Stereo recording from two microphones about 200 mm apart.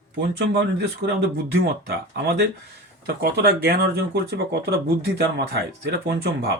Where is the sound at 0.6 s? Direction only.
60° right (ahead or behind).